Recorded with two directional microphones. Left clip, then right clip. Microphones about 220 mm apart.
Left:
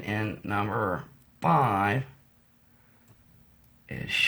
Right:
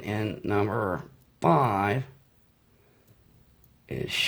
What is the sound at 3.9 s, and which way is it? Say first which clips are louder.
Speech: right 4 dB; 35° right (ahead or behind).